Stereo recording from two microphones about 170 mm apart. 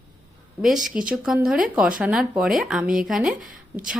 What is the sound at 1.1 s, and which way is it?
Speech, 5° right (ahead or behind).